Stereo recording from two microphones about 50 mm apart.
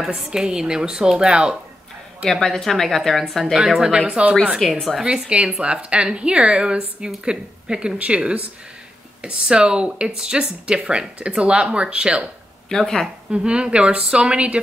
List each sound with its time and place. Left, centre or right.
0.1 s speech: centre
2.2 s speech: centre
3.5 s speech: centre
4.6 s speech: centre
5.0 s speech: centre
12.6 s speech: centre
13.3 s speech: centre